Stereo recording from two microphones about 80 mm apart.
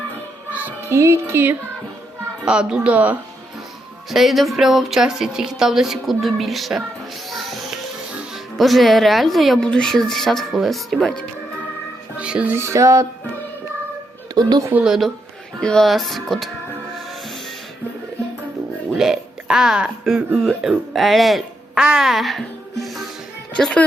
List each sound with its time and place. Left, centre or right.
0.5 s music: right
0.9 s speech: right
2.4 s speech: centre
4.1 s speech: centre
7.3 s music: centre
8.5 s speech: centre
12.1 s music: centre
12.5 s speech: right
14.8 s speech: centre
15.6 s speech: centre
18.9 s speech: centre